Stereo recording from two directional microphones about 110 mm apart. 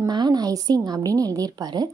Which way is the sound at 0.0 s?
40° right (ahead or behind).